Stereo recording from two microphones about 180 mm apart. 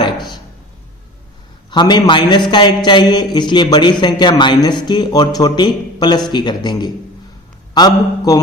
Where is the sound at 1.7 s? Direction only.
25° left (ahead or behind).